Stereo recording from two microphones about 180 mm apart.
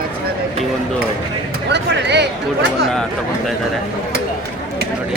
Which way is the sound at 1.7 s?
70° right (ahead or behind).